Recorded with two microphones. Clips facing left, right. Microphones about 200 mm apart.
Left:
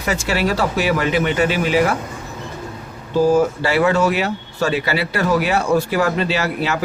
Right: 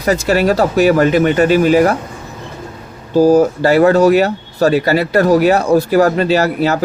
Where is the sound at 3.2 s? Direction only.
40° right (ahead or behind).